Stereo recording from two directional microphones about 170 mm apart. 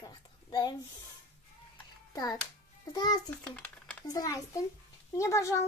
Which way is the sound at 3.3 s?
5° left (ahead or behind).